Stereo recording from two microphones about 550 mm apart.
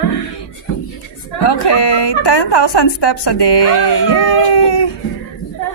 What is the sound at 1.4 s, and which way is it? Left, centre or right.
Speech, left.